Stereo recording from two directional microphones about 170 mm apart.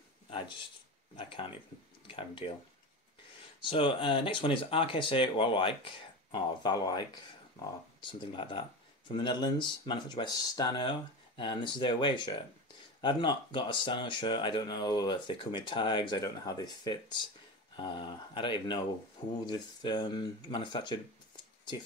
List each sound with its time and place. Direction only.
1.1 s speech: 30° left (ahead or behind)
3.6 s speech: 30° left (ahead or behind)
8.1 s speech: 30° left (ahead or behind)